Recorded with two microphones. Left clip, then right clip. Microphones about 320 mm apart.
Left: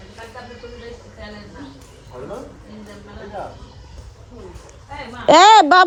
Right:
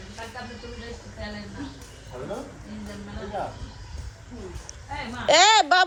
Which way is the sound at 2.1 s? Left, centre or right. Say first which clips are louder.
Left 3 dB; right.